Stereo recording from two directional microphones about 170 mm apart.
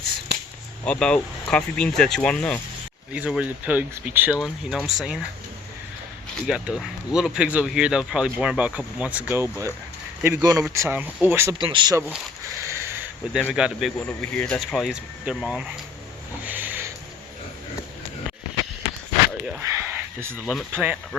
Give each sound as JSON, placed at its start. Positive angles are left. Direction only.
{"t": 0.9, "sound": "speech", "side_deg": 5}
{"t": 3.1, "sound": "speech", "side_deg": -5}
{"t": 6.5, "sound": "speech", "side_deg": -5}
{"t": 11.5, "sound": "speech", "side_deg": -25}
{"t": 12.0, "sound": "a sound", "side_deg": -15}
{"t": 13.5, "sound": "speech", "side_deg": -5}
{"t": 16.4, "sound": "a sound", "side_deg": -10}
{"t": 19.5, "sound": "speech", "side_deg": -15}